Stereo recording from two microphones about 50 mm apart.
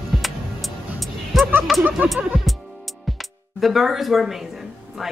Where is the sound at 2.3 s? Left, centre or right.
Centre.